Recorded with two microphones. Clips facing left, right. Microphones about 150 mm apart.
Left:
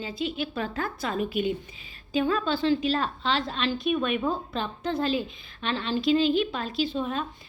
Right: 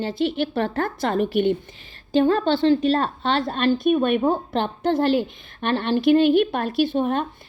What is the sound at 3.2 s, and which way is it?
A woman's voice, 55° right (ahead or behind).